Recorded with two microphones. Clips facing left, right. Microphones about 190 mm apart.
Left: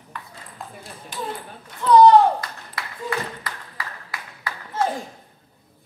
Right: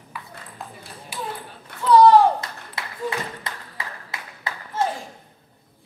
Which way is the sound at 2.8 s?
25° right (ahead or behind).